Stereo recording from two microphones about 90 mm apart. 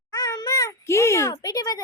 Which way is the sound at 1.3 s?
45° left (ahead or behind).